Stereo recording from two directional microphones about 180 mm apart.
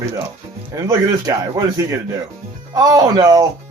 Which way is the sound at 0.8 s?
20° right (ahead or behind).